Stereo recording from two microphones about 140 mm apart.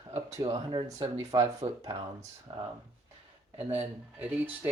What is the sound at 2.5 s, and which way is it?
Speech, 30° right (ahead or behind).